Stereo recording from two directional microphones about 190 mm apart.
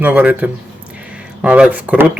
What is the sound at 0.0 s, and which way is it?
Speech, 5° right (ahead or behind).